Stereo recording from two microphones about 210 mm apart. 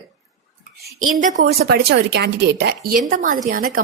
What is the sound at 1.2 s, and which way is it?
Speech, 35° right (ahead or behind).